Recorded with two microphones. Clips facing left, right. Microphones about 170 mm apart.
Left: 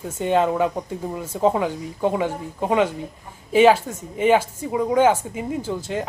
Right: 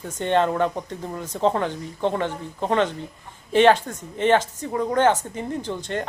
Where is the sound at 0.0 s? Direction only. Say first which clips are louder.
Left 1 dB; 5° left (ahead or behind).